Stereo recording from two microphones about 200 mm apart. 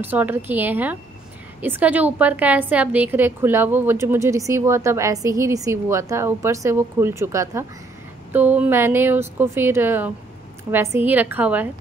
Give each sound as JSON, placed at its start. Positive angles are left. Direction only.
{"t": 0.0, "sound": "a woman's voice", "side_deg": -10}